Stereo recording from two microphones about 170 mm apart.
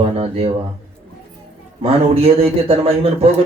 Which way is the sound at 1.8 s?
35° right (ahead or behind).